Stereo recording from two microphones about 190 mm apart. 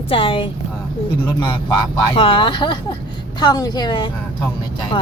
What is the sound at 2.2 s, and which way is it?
Speech, 25° left (ahead or behind).